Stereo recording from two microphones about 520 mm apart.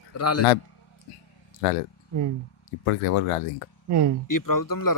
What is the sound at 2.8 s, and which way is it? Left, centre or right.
Speech, left.